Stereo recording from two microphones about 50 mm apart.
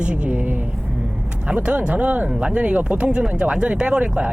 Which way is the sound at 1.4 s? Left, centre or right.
Right.